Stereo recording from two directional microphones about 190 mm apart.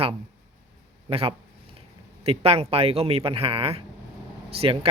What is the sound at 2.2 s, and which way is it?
A man's voice, 30° right (ahead or behind).